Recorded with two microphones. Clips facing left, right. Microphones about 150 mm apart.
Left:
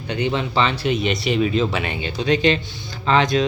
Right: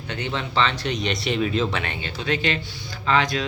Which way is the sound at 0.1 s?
15° left (ahead or behind).